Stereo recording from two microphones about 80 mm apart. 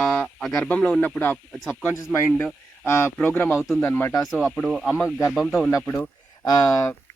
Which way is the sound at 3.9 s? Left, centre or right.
Left.